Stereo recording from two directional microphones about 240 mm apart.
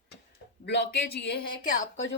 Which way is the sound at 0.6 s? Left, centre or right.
Left.